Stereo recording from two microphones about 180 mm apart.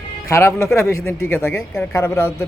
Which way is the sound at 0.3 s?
15° left (ahead or behind).